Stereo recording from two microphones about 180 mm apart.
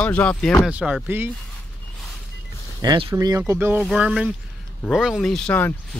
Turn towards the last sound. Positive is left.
turn(degrees=10)  # may be behind; listen again after turning